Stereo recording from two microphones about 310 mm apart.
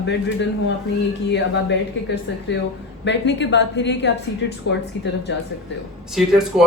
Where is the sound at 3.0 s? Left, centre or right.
Left.